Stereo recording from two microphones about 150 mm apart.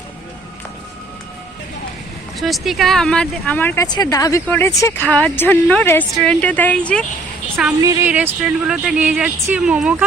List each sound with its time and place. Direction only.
2.4 s speech: centre (ahead or behind)
3.8 s a woman's voice: 25° left (ahead or behind)
5.0 s a woman's voice: 10° left (ahead or behind)
7.8 s speech: 20° right (ahead or behind)